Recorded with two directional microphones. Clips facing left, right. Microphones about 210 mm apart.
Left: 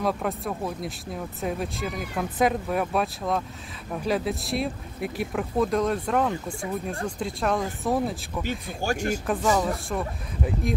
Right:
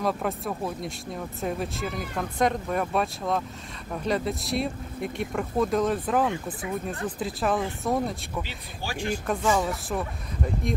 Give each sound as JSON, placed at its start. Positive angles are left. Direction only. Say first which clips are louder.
{"t": 0.0, "sound": "speech", "louder": "left 1 dB", "side_deg": 0}
{"t": 8.5, "sound": "speech", "louder": "left 8 dB", "side_deg": 45}
{"t": 9.2, "sound": "speech", "louder": "right 1 dB", "side_deg": 0}